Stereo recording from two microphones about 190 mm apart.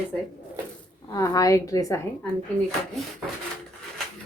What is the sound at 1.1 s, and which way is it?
Speech, 20° left (ahead or behind).